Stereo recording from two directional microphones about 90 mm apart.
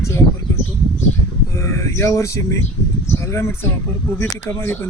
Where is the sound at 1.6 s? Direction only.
35° left (ahead or behind).